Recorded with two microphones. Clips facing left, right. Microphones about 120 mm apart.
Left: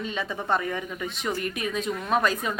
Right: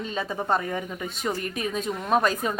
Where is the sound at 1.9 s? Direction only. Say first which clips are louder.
Right 2 dB; 25° right (ahead or behind).